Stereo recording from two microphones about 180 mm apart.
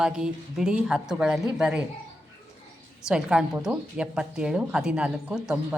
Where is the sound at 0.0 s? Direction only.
5° right (ahead or behind).